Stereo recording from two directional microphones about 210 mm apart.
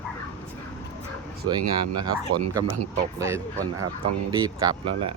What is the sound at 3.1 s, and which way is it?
Speech, 15° right (ahead or behind).